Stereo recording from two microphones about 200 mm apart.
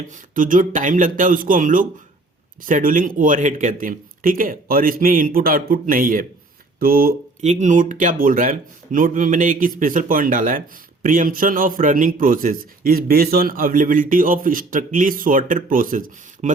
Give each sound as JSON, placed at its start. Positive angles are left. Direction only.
{"t": 0.1, "sound": "a man's voice", "side_deg": -40}
{"t": 7.4, "sound": "a man's voice", "side_deg": -35}